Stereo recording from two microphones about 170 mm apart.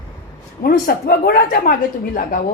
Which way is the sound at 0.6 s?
60° left (ahead or behind).